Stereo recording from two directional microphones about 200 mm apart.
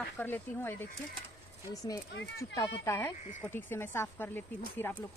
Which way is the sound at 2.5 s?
10° left (ahead or behind).